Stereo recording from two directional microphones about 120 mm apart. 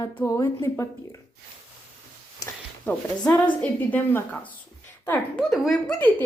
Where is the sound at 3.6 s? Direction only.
15° left (ahead or behind).